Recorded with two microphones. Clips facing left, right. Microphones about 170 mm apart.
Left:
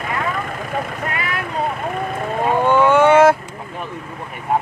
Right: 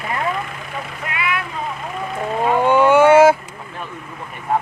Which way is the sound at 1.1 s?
40° left (ahead or behind).